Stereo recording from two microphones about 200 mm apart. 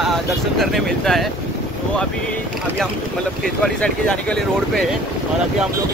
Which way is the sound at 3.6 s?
5° left (ahead or behind).